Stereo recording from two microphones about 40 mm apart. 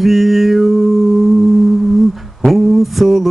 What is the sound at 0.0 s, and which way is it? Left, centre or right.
Music, centre.